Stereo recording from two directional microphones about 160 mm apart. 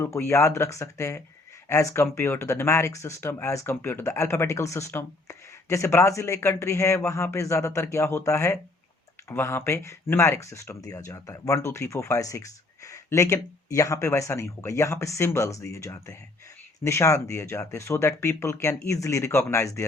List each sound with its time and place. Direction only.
0.0 s speech: 15° left (ahead or behind)